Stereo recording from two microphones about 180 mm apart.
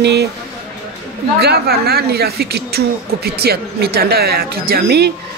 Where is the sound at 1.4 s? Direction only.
60° right (ahead or behind).